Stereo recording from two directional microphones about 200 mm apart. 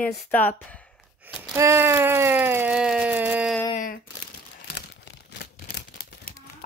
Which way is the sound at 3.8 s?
45° left (ahead or behind).